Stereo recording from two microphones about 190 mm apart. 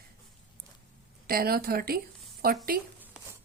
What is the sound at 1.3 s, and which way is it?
Speech, 55° right (ahead or behind).